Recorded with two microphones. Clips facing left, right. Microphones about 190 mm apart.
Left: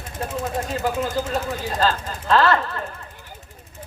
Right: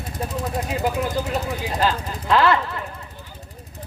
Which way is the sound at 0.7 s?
15° right (ahead or behind).